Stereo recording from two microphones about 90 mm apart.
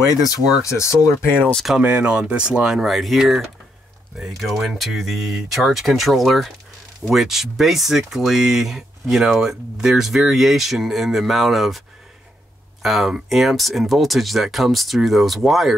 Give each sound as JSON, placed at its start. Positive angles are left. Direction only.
{"t": 0.6, "sound": "speech", "side_deg": 35}
{"t": 1.4, "sound": "speech", "side_deg": 10}
{"t": 1.8, "sound": "speech", "side_deg": -15}
{"t": 12.8, "sound": "speech", "side_deg": 0}